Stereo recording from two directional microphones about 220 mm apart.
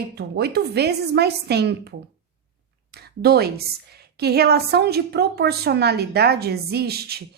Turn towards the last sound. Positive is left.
turn(degrees=-45)  # may be behind; listen again after turning